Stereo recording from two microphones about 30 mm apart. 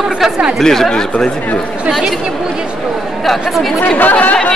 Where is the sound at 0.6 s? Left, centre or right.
Centre.